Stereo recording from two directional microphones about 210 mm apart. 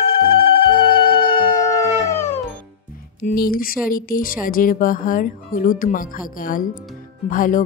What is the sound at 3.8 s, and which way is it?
A woman's voice, 40° left (ahead or behind).